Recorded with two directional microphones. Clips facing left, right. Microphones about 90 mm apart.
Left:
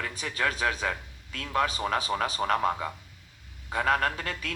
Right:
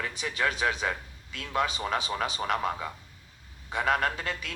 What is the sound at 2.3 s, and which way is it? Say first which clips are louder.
A man's voice: left 3 dB; 35° left (ahead or behind).